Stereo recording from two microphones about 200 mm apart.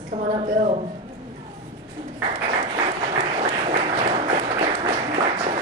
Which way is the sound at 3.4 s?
35° right (ahead or behind).